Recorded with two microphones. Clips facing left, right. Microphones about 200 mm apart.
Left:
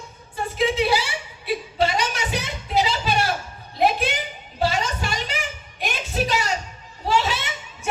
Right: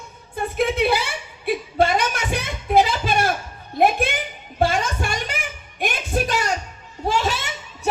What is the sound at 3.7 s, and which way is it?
Music, 55° right (ahead or behind).